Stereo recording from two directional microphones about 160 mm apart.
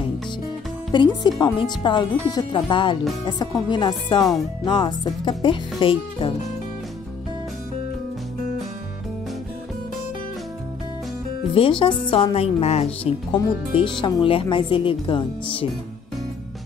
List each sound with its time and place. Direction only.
0.9 s speech: 30° left (ahead or behind)
11.5 s speech: 35° left (ahead or behind)